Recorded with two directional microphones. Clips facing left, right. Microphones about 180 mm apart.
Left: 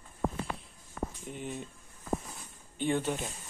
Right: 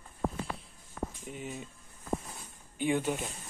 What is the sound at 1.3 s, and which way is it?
Speech, centre (ahead or behind).